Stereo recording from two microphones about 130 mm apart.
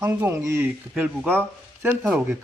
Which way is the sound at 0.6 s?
5° right (ahead or behind).